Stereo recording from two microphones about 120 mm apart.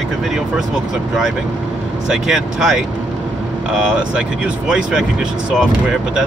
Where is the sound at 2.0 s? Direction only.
5° right (ahead or behind).